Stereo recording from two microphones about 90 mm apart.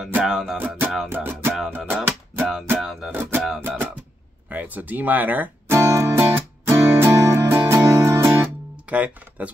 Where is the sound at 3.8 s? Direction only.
20° right (ahead or behind).